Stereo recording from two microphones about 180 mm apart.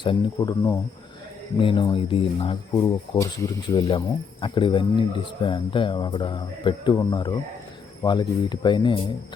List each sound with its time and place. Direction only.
0.0 s speech: 25° left (ahead or behind)
2.7 s speech: 15° left (ahead or behind)
3.8 s speech: 30° left (ahead or behind)